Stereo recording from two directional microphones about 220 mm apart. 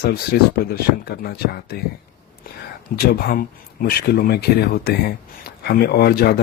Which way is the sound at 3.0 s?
40° left (ahead or behind).